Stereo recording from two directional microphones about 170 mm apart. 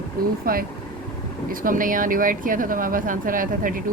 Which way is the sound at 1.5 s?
55° right (ahead or behind).